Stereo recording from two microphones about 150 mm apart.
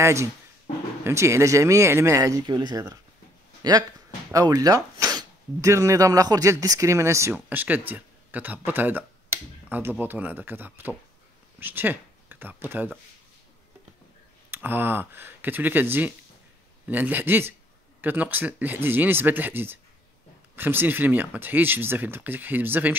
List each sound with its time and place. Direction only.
0.0 s speech: 20° right (ahead or behind)
4.3 s speech: 25° right (ahead or behind)
14.5 s speech: 15° right (ahead or behind)